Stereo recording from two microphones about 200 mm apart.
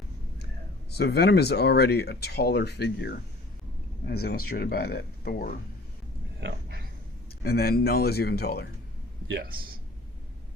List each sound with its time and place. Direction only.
0.9 s speech: 55° left (ahead or behind)
7.4 s speech: 50° left (ahead or behind)